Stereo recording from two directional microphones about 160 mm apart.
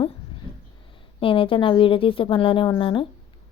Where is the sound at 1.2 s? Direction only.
35° left (ahead or behind).